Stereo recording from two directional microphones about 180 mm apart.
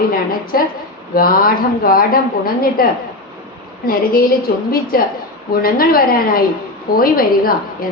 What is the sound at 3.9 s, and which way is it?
A woman's voice, 55° left (ahead or behind).